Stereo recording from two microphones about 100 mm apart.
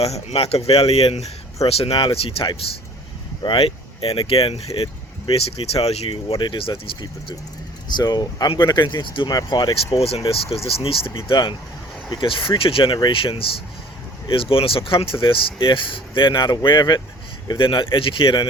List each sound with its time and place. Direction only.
0.0 s speech: 90° left
1.6 s speech: 75° left (ahead or behind)
6.4 s speech: 55° left (ahead or behind)
7.9 s speech: 45° left (ahead or behind)
9.9 s speech: 85° left; by 18.3 s 60° left (ahead or behind)